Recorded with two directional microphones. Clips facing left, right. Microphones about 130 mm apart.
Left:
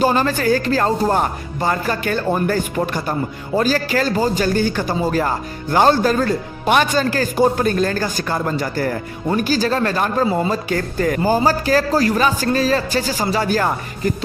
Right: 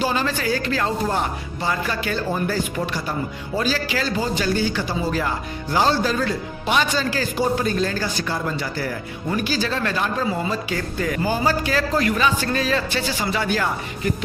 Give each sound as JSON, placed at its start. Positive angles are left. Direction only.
{"t": 0.0, "sound": "a man's voice", "side_deg": 45}